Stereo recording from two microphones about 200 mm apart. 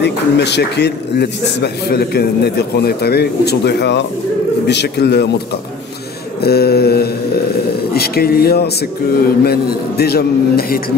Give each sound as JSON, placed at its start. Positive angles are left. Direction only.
{"t": 0.0, "sound": "a man's voice", "side_deg": 55}
{"t": 6.4, "sound": "a man's voice", "side_deg": 50}